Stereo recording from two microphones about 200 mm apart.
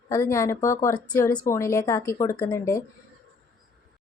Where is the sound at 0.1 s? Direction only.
15° left (ahead or behind).